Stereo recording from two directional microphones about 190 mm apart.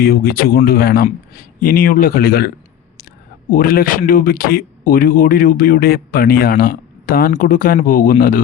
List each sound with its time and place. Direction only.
0.0 s speech: 55° left (ahead or behind)
3.5 s speech: 50° left (ahead or behind)